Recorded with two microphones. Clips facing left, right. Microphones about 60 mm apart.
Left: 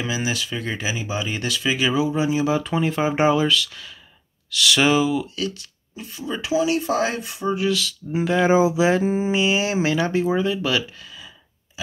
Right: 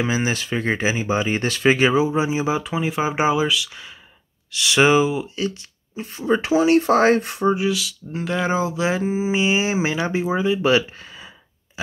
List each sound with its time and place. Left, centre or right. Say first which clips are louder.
0.0 s speech: right 3 dB; right
2.6 s speech: left 1 dB; centre; by 7.5 s right
7.5 s speech: even; centre
8.1 s speech: left 5 dB; centre
8.9 s speech: left 2 dB; centre
9.3 s speech: right 1 dB; right
10.6 s speech: right 5 dB; right